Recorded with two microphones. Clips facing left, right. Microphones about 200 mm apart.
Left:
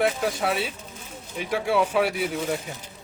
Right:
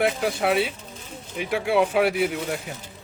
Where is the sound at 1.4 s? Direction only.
10° right (ahead or behind).